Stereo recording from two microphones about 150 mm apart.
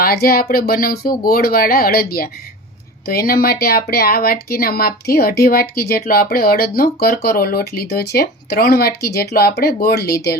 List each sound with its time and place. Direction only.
0.0 s speech: 85° left